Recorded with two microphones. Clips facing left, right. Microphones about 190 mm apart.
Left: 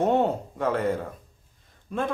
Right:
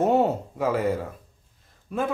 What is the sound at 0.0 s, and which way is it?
Speech, 5° right (ahead or behind).